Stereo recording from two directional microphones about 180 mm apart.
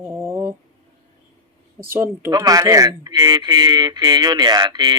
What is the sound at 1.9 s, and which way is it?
Speech, 15° right (ahead or behind).